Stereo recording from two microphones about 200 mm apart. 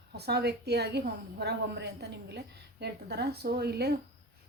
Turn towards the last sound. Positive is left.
turn(degrees=-55)  # may be behind; listen again after turning